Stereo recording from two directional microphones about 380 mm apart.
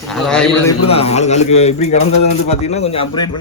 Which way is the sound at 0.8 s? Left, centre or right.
Centre.